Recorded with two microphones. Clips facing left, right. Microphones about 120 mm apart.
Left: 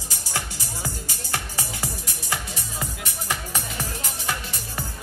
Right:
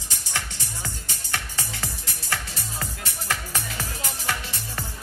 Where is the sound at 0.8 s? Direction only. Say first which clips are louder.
Left 4 dB; 30° left (ahead or behind).